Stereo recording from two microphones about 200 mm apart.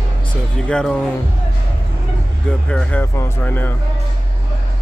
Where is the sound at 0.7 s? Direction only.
5° left (ahead or behind).